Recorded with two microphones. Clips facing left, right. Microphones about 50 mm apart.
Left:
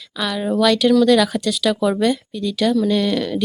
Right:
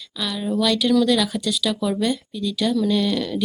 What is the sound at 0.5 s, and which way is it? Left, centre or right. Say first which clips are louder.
Speech: left 5 dB; left.